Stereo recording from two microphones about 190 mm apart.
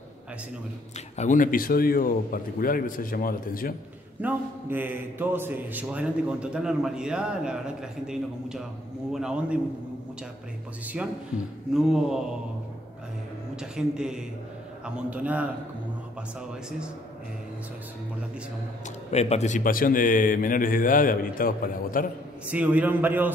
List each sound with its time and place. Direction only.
0.9 s speech: 35° left (ahead or behind)
4.2 s a man's voice: 10° right (ahead or behind)
11.7 s a man's voice: centre (ahead or behind)
13.6 s a man's voice: 5° right (ahead or behind)
19.0 s speech: 35° left (ahead or behind)
22.5 s a man's voice: 10° right (ahead or behind)